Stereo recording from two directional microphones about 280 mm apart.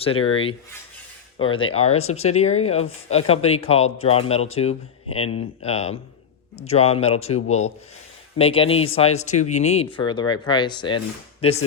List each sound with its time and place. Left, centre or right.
0.0 s speech: centre
1.6 s speech: left